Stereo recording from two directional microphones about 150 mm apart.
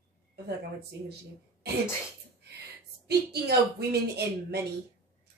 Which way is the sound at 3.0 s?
90° right.